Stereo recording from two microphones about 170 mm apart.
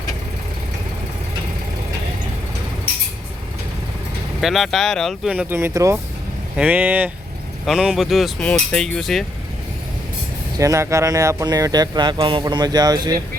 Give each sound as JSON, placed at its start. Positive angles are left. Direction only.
{"t": 4.4, "sound": "speech", "side_deg": 0}
{"t": 10.6, "sound": "speech", "side_deg": -15}